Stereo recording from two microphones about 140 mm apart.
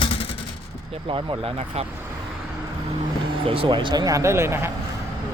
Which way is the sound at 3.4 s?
40° right (ahead or behind).